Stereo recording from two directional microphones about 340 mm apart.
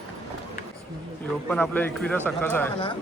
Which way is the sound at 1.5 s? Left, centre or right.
Centre.